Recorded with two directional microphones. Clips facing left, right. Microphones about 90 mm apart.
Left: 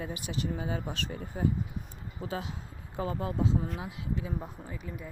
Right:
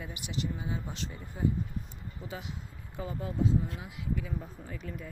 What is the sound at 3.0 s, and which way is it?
Speech, 80° left.